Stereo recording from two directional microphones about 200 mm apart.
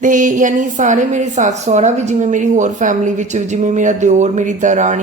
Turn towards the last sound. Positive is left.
turn(degrees=-40)  # may be behind; listen again after turning